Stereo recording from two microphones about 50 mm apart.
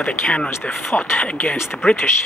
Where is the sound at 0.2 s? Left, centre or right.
Centre.